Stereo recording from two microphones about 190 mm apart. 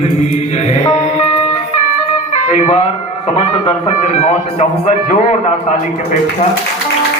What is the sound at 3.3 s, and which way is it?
A man's voice, 35° left (ahead or behind).